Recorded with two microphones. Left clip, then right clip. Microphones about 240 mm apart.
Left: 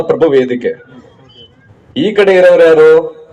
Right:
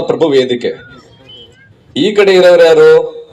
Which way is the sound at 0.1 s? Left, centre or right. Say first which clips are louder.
Left 1 dB; right.